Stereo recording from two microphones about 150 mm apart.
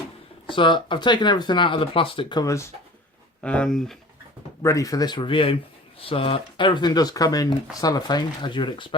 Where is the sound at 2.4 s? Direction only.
20° left (ahead or behind).